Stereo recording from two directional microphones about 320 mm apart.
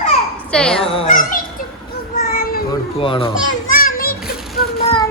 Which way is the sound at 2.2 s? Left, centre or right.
Left.